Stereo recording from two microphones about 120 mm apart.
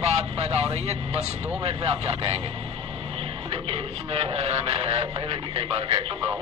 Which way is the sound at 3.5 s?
55° right (ahead or behind).